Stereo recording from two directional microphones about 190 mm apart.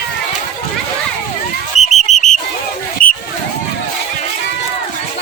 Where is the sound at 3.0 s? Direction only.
50° left (ahead or behind).